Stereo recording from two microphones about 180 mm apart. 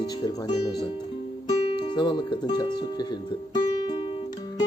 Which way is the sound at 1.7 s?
25° left (ahead or behind).